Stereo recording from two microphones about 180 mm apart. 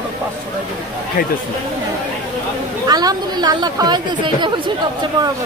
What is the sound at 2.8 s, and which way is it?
Speech, 20° right (ahead or behind).